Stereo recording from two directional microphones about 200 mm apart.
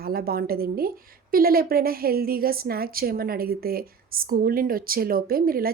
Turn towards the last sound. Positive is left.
turn(degrees=-45)  # may be behind; listen again after turning